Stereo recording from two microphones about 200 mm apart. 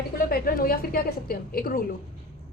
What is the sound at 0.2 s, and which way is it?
A woman's voice, 45° left (ahead or behind).